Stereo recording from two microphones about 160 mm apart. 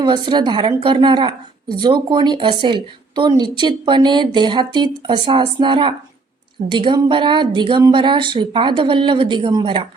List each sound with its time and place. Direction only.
0.0 s a woman's voice: 30° right (ahead or behind)